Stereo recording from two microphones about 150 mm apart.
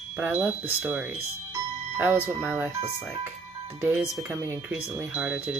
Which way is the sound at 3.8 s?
10° right (ahead or behind).